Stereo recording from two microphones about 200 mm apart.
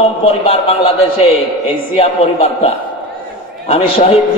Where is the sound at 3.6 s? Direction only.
30° left (ahead or behind).